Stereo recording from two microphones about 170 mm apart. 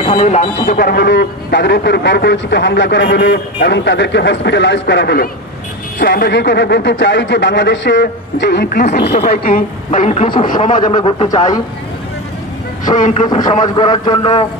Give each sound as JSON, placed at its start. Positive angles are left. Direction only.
{"t": 0.0, "sound": "speech", "side_deg": 40}
{"t": 0.7, "sound": "a man's voice", "side_deg": 70}
{"t": 8.9, "sound": "speech", "side_deg": 70}
{"t": 9.8, "sound": "speech", "side_deg": 40}
{"t": 10.9, "sound": "a man's voice", "side_deg": 30}
{"t": 12.9, "sound": "speech", "side_deg": 45}
{"t": 13.6, "sound": "a man's voice", "side_deg": 25}